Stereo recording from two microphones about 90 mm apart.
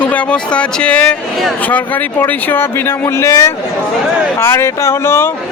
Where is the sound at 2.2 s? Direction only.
25° left (ahead or behind).